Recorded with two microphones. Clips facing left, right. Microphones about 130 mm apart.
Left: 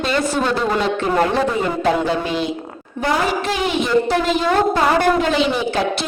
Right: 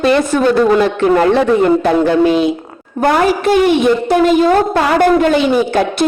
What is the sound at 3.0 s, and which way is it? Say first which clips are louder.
Speech: right 7 dB; 65° right (ahead or behind).